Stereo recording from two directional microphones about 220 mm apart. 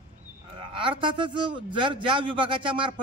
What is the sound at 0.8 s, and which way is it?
A man's voice, 20° right (ahead or behind).